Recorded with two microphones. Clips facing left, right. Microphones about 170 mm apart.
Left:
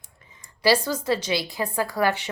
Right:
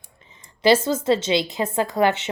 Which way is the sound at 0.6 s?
25° right (ahead or behind).